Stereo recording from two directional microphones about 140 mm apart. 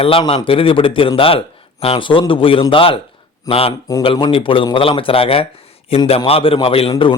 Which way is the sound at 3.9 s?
30° left (ahead or behind).